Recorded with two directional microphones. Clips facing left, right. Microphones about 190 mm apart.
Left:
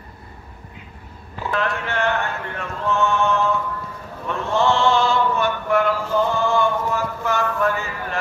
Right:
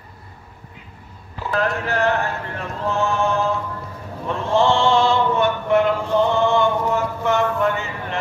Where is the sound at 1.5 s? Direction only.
40° right (ahead or behind).